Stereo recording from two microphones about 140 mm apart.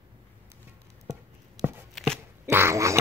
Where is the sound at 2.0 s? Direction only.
Centre (ahead or behind).